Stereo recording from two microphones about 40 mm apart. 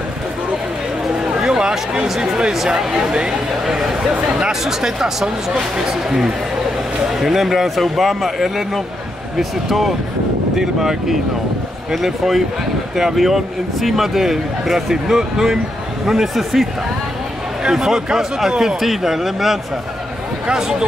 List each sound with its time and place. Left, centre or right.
1.4 s speech: centre
16.1 s speech: centre
17.6 s speech: centre